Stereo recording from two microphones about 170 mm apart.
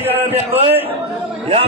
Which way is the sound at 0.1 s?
35° right (ahead or behind).